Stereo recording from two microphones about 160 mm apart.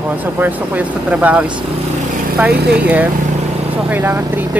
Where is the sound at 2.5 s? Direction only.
90° right.